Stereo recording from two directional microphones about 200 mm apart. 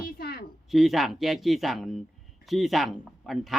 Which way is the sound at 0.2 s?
50° left (ahead or behind).